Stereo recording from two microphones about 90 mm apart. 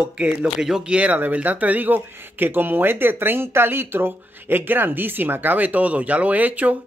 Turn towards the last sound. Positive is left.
turn(degrees=-15)  # may be behind; listen again after turning